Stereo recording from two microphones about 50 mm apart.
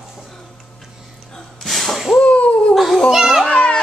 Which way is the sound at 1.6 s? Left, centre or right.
Centre.